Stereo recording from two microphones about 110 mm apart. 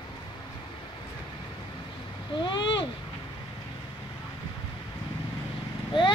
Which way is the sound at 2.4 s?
45° left (ahead or behind).